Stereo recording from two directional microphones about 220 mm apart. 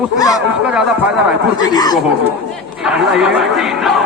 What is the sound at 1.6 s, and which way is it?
Speech, 15° left (ahead or behind).